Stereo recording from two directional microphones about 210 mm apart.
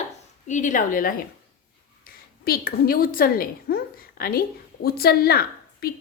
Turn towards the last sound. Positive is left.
turn(degrees=45)  # may be behind; listen again after turning